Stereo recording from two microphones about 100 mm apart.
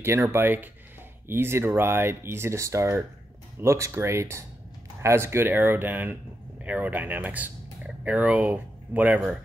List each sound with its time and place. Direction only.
0.0 s speech: 25° right (ahead or behind)